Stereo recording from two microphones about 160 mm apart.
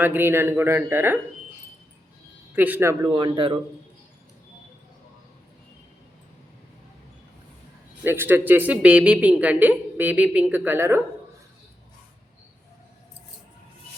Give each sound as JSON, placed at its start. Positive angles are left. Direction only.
{"t": 0.0, "sound": "a woman's voice", "side_deg": -10}
{"t": 2.6, "sound": "a woman's voice", "side_deg": -10}
{"t": 3.0, "sound": "speech", "side_deg": -25}
{"t": 8.0, "sound": "a woman's voice", "side_deg": -15}